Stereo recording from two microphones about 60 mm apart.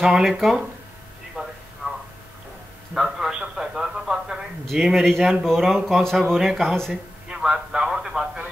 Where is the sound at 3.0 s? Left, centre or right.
Centre.